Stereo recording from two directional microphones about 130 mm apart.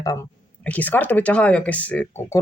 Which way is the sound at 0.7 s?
15° left (ahead or behind).